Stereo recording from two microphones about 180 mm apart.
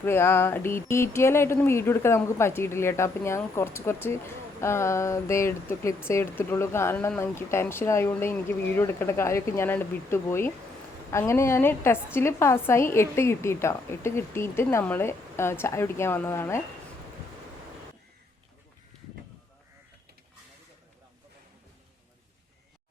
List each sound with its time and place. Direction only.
0.0 s a woman's voice: 15° left (ahead or behind)